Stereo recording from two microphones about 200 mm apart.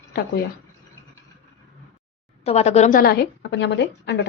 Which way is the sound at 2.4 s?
35° left (ahead or behind).